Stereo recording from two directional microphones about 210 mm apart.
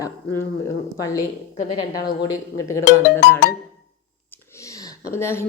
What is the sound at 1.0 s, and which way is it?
Speech, 15° left (ahead or behind).